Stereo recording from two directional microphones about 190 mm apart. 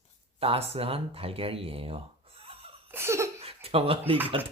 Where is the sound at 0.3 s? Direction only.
30° right (ahead or behind).